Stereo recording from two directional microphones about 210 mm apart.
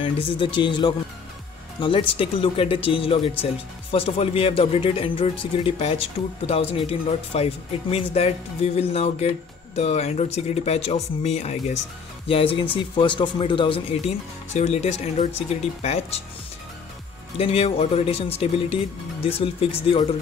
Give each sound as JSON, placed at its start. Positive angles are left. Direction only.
{"t": 0.0, "sound": "speech", "side_deg": 25}
{"t": 17.4, "sound": "speech", "side_deg": 30}